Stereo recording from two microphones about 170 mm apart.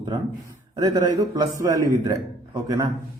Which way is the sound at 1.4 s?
20° right (ahead or behind).